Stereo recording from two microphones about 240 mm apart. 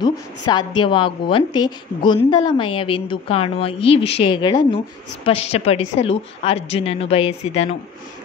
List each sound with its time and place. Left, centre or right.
0.0 s a woman's voice: centre